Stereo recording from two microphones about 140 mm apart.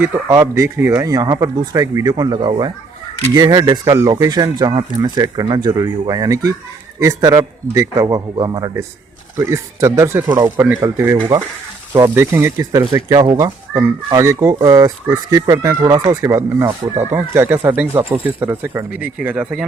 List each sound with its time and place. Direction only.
0.0 s speech: 20° right (ahead or behind)